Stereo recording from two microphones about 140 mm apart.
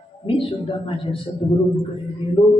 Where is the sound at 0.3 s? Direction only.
40° left (ahead or behind).